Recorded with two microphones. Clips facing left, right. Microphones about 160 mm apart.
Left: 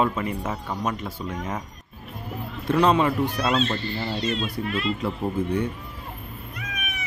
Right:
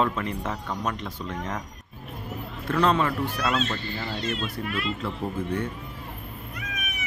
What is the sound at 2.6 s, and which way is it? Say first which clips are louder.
Speech: left 3 dB; 15° left (ahead or behind).